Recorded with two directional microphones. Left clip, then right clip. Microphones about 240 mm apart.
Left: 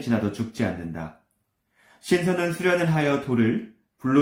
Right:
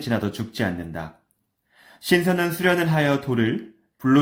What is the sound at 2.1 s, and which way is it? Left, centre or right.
A man's voice, right.